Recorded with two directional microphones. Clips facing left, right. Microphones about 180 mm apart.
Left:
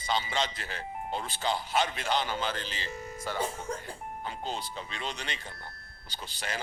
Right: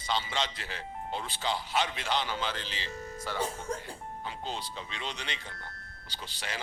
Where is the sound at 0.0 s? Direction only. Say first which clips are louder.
Left 2 dB; 45° left (ahead or behind).